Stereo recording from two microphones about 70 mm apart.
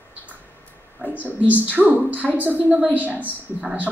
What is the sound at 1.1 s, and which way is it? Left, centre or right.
A woman's voice, right.